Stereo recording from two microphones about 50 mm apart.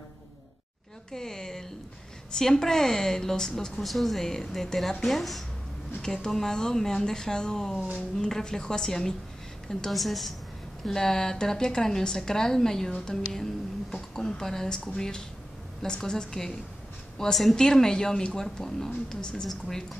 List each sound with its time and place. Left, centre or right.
1.1 s a sound: centre
2.3 s a woman's voice: centre
19.4 s a woman's voice: centre